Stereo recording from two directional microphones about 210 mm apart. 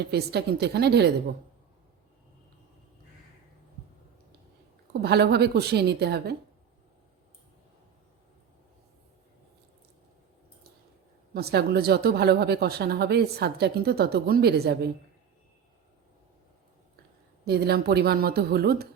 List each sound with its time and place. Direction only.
0.1 s speech: 50° right (ahead or behind)
4.9 s speech: 50° right (ahead or behind)
11.3 s speech: 50° right (ahead or behind)
17.4 s speech: 50° right (ahead or behind)